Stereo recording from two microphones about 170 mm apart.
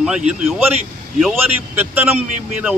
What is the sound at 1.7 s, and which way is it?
Speech, 10° right (ahead or behind).